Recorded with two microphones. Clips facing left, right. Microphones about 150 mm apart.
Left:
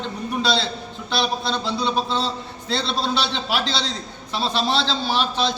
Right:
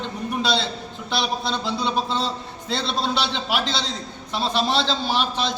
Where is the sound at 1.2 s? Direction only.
15° right (ahead or behind).